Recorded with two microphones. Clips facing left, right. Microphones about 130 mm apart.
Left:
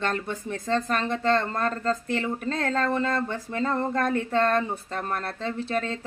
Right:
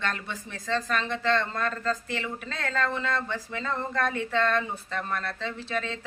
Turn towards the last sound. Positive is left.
turn(degrees=45)  # may be behind; listen again after turning